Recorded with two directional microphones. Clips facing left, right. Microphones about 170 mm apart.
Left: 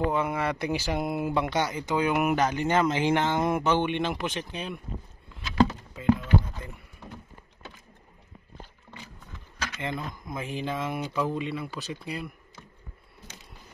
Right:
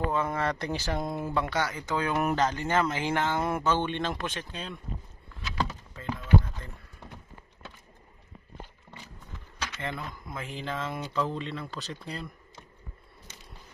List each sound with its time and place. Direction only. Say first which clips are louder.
0.1 s speech: left 1 dB; 15° left (ahead or behind)
5.9 s clip-clop: left 13 dB; 10° left (ahead or behind)
9.8 s speech: left 4 dB; 15° left (ahead or behind)